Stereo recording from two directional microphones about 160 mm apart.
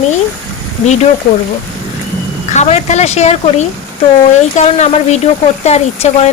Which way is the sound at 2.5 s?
45° left (ahead or behind).